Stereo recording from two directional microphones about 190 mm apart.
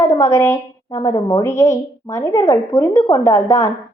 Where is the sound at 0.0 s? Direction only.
15° left (ahead or behind).